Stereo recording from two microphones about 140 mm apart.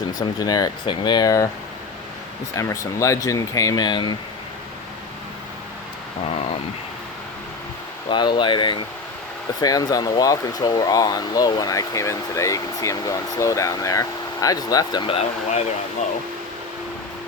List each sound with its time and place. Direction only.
0.2 s speech: 25° left (ahead or behind)
2.6 s speech: 20° left (ahead or behind)
8.1 s speech: 35° left (ahead or behind)
15.0 s speech: 45° left (ahead or behind)